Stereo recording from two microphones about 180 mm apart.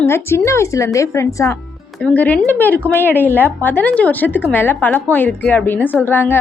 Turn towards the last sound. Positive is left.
turn(degrees=10)  # may be behind; listen again after turning